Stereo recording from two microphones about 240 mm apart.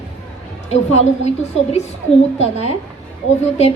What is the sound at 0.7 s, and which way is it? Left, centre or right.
A woman's voice, left.